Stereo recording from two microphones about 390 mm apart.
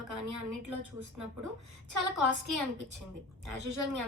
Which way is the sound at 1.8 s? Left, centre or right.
Right.